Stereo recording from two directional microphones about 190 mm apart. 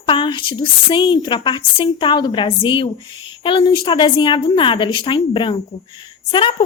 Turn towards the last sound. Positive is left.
turn(degrees=30)  # may be behind; listen again after turning